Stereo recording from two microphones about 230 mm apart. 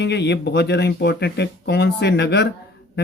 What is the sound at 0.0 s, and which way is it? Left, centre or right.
Speech, left.